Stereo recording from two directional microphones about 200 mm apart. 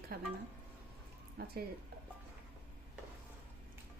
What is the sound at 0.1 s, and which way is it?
Speech, 50° right (ahead or behind).